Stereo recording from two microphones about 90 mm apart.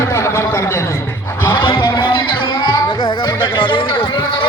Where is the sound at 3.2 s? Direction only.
55° left (ahead or behind).